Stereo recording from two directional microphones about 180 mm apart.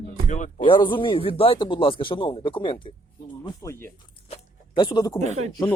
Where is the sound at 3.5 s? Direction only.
15° left (ahead or behind).